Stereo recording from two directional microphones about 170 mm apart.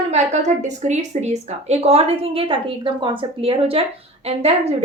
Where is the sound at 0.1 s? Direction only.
40° right (ahead or behind).